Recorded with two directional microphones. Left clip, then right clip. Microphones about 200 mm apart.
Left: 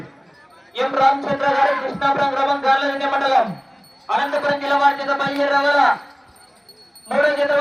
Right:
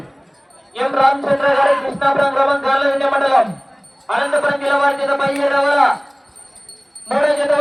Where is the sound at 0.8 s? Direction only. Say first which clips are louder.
Right 2 dB; 45° left (ahead or behind).